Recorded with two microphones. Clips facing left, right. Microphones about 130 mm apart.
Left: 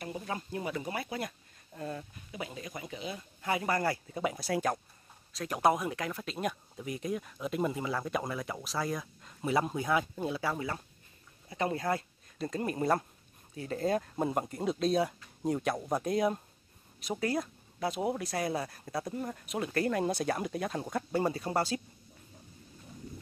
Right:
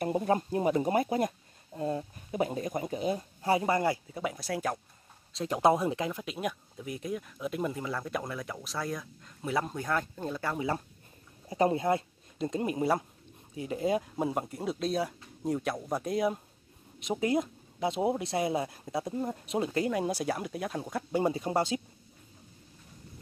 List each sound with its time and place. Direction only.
0.0 s speech: 40° right (ahead or behind)
1.7 s a sound: 25° right (ahead or behind)
2.3 s a sound: 40° right (ahead or behind); by 4.0 s 20° right (ahead or behind)
4.1 s speech: centre (ahead or behind)
5.3 s speech: 25° right (ahead or behind); by 10.6 s 5° left (ahead or behind)
11.4 s speech: 35° right (ahead or behind)
11.7 s speech: 20° right (ahead or behind); by 16.3 s centre (ahead or behind)
17.0 s speech: 20° right (ahead or behind)
19.7 s speech: 10° right (ahead or behind)
21.2 s speech: 15° right (ahead or behind)